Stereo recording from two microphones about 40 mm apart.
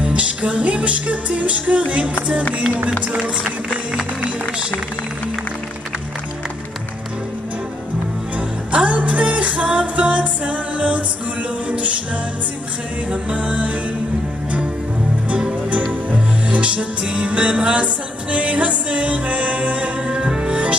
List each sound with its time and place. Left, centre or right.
0.0 s music: right
8.4 s music: right
13.1 s music: right
15.2 s music: right